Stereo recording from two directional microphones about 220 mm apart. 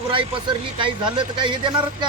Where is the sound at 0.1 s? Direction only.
25° right (ahead or behind).